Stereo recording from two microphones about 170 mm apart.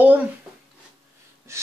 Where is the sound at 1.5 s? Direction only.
15° right (ahead or behind).